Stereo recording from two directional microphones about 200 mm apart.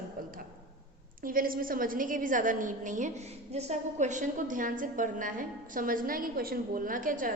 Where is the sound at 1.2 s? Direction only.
45° right (ahead or behind).